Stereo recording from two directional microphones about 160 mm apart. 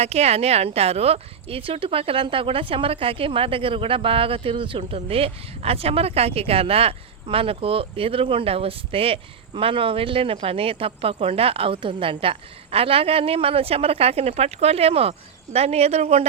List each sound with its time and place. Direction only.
0.0 s speech: 40° right (ahead or behind)